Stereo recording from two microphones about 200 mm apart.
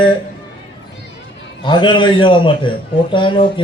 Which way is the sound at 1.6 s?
25° left (ahead or behind).